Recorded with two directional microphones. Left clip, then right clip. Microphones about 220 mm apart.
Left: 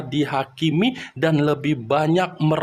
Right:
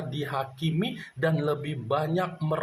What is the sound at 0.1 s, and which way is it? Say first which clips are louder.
Speech: left 10 dB; 45° left (ahead or behind).